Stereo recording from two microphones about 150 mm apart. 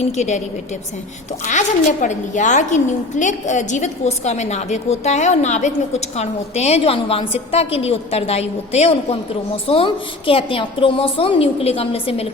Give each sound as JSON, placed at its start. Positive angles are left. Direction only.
{"t": 0.0, "sound": "a woman's voice", "side_deg": 50}
{"t": 1.5, "sound": "a woman's voice", "side_deg": 55}